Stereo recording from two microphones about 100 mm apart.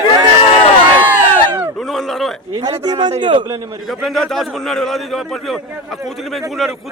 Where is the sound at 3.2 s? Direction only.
55° right (ahead or behind).